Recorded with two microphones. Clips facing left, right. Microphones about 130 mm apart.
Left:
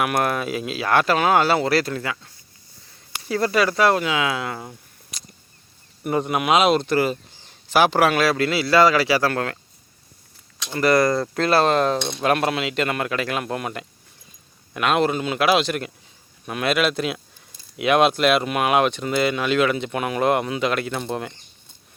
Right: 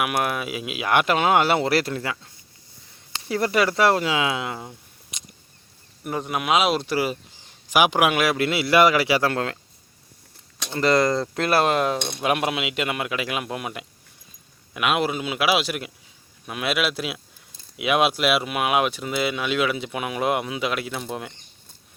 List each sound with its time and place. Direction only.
0.0 s speech: 5° right (ahead or behind)
5.1 s a sound: 20° right (ahead or behind)
6.0 s speech: centre (ahead or behind); by 9.6 s 20° right (ahead or behind)
10.8 s speech: 20° right (ahead or behind); by 21.3 s centre (ahead or behind)